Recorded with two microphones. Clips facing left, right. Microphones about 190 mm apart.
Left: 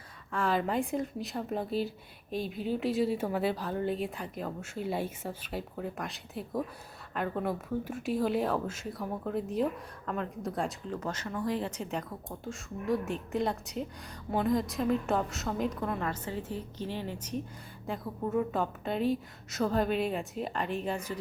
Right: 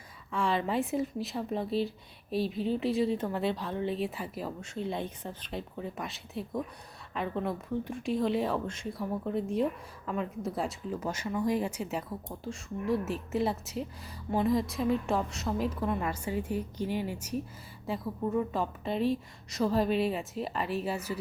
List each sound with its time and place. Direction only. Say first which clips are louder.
0.3 s a woman's voice: even; centre (ahead or behind)
4.6 s a woman's voice: left 2 dB; 5° left (ahead or behind)